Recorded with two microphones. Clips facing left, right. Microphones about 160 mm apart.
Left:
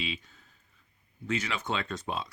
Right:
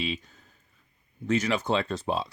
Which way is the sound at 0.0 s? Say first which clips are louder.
Right 5 dB; 40° right (ahead or behind).